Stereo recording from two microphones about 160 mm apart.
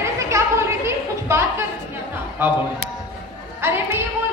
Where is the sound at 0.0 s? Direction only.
15° right (ahead or behind).